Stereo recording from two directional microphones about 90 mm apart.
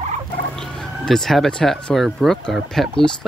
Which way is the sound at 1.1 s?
5° left (ahead or behind).